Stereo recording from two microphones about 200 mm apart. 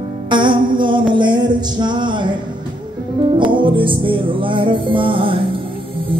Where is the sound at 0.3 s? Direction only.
25° right (ahead or behind).